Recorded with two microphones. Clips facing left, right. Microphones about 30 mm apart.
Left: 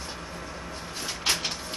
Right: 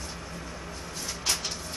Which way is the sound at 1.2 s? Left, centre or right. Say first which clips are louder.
Left 3 dB; left.